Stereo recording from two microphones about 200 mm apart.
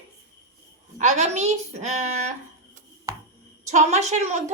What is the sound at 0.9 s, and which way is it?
A woman's voice, 35° right (ahead or behind).